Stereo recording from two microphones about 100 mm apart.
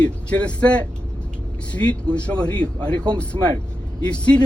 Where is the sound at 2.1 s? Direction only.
10° left (ahead or behind).